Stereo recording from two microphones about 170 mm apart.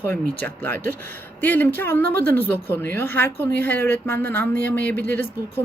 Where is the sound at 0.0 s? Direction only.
10° left (ahead or behind).